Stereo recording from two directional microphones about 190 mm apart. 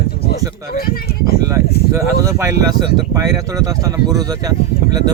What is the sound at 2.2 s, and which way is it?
Speech, 15° right (ahead or behind).